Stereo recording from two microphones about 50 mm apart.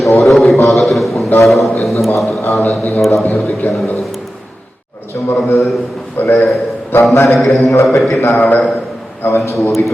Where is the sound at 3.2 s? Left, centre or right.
Left.